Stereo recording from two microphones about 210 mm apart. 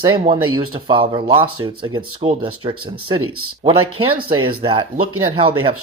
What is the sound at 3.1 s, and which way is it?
Speech, 90° right.